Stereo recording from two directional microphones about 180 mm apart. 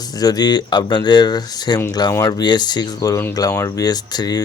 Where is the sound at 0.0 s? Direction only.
20° left (ahead or behind).